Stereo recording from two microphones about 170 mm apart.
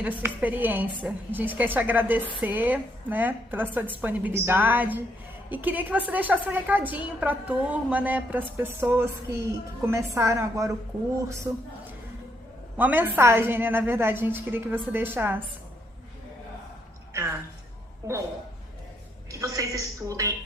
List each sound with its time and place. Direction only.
0.0 s a woman's voice: 10° right (ahead or behind)
12.7 s a woman's voice: 10° right (ahead or behind)
19.3 s a woman's voice: 20° right (ahead or behind)